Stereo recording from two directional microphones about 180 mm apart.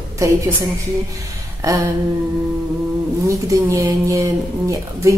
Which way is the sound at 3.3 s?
15° right (ahead or behind).